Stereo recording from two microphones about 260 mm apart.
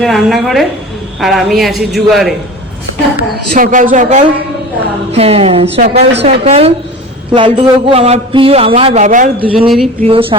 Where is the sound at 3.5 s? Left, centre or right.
Right.